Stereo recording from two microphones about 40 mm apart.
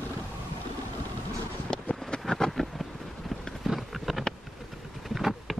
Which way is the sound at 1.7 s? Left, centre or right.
Centre.